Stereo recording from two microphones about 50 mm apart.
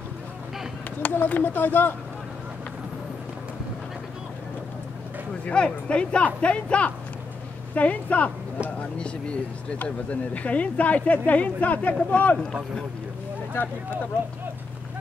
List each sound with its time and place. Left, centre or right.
1.1 s speech: left
5.4 s speech: left
9.8 s speech: left
13.6 s speech: left